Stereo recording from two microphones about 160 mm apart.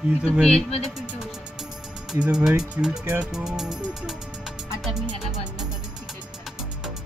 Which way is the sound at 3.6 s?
25° right (ahead or behind).